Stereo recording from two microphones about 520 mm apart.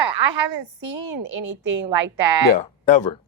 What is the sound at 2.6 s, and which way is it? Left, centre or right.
Speech, left.